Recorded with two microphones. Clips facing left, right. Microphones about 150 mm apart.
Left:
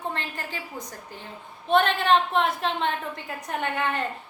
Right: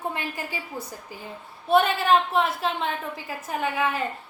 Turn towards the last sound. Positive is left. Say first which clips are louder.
# right 1 dB
turn(degrees=-5)  # may be behind; listen again after turning